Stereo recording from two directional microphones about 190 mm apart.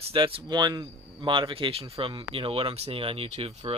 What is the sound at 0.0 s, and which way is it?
Speech, 30° right (ahead or behind).